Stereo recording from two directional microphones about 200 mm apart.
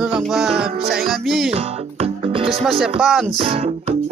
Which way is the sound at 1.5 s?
30° right (ahead or behind).